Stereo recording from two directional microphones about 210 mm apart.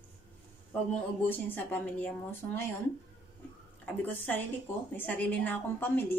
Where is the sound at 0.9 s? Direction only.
10° left (ahead or behind).